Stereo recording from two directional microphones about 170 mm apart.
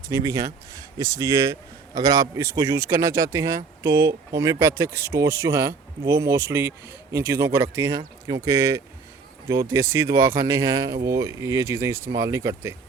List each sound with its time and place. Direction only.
0.1 s speech: 20° right (ahead or behind)